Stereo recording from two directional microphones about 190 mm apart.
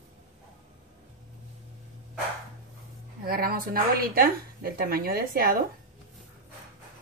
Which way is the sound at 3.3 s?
50° right (ahead or behind).